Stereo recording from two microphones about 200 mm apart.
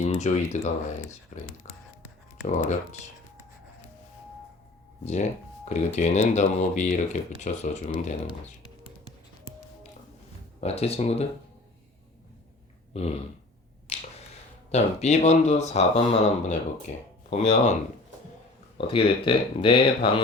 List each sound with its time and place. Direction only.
0.0 s speech: 35° left (ahead or behind)
1.3 s a sound: 40° left (ahead or behind)
2.5 s speech: 35° left (ahead or behind)
5.0 s speech: 35° left (ahead or behind)
10.6 s speech: 30° left (ahead or behind)
12.9 s burping: 30° left (ahead or behind)
13.9 s finger snapping: 30° left (ahead or behind)
14.7 s speech: 35° left (ahead or behind)
18.8 s speech: 25° left (ahead or behind)